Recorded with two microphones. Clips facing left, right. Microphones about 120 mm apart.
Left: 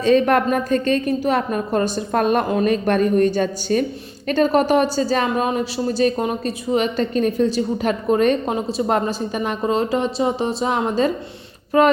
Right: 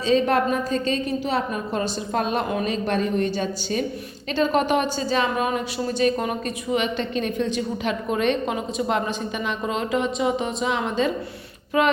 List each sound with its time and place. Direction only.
0.0 s a woman's voice: 55° left (ahead or behind); by 11.9 s 40° left (ahead or behind)